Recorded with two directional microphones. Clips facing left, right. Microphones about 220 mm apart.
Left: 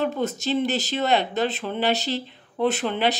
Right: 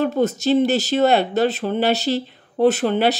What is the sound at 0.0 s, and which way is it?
Speech, 40° right (ahead or behind).